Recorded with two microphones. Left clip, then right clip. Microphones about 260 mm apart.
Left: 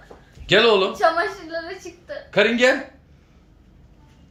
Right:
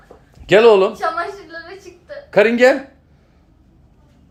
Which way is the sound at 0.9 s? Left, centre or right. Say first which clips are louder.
Left 2 dB; left.